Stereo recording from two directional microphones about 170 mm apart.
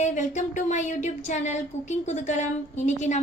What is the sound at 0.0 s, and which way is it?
Speech, 45° left (ahead or behind).